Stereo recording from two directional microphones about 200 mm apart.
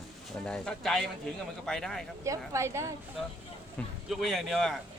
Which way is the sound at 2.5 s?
15° right (ahead or behind).